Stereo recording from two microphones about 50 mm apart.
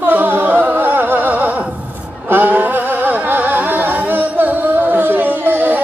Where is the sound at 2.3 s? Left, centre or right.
Right.